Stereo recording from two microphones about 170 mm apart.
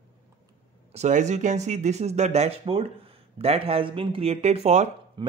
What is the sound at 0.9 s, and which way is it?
Speech, 45° right (ahead or behind).